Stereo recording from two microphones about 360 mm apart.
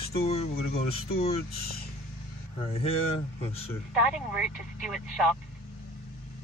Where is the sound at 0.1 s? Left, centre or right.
Centre.